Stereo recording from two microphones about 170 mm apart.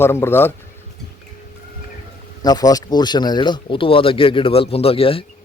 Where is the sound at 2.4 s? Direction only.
20° left (ahead or behind).